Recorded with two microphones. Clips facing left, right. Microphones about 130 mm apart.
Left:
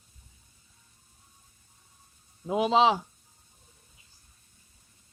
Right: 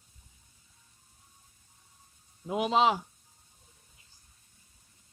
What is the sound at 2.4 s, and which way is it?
Speech, 30° left (ahead or behind).